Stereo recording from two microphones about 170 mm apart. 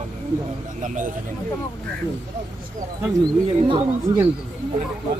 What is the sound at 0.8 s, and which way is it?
Speech, 50° right (ahead or behind).